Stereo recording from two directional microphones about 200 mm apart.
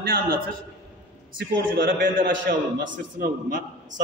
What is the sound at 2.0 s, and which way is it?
A man's voice, 45° right (ahead or behind).